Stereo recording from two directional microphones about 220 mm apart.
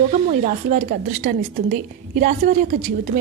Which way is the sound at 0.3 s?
35° right (ahead or behind).